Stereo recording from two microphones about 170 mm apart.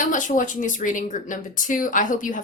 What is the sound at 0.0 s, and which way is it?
A woman's voice, 50° left (ahead or behind).